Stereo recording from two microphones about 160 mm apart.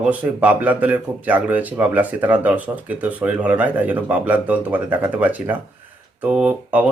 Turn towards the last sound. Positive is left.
turn(degrees=-5)  # may be behind; listen again after turning